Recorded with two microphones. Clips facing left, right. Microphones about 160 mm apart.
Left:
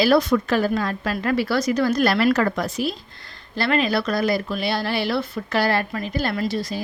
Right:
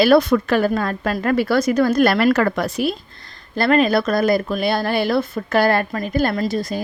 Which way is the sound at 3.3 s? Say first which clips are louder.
Right 5 dB; 45° right (ahead or behind).